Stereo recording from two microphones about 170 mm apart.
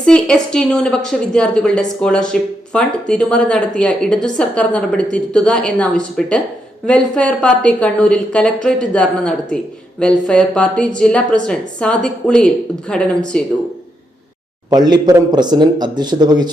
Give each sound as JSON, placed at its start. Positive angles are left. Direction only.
{"t": 0.0, "sound": "a woman's voice", "side_deg": 5}
{"t": 14.7, "sound": "speech", "side_deg": -25}